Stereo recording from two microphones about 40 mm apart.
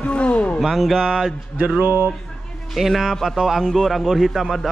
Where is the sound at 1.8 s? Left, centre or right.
Right.